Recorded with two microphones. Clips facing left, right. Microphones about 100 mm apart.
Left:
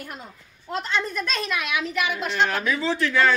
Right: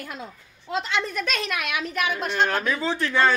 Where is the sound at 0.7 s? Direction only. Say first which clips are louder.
Even; 90° right.